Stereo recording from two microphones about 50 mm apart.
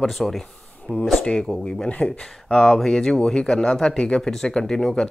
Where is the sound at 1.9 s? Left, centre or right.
Left.